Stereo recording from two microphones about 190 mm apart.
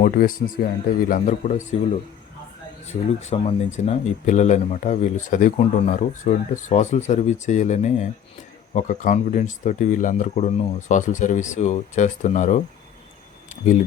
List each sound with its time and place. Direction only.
0.0 s speech: 45° left (ahead or behind)
2.8 s speech: 35° left (ahead or behind)